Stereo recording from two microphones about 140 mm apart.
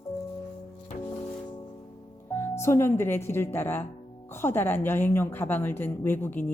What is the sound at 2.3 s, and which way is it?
Speech, 20° left (ahead or behind).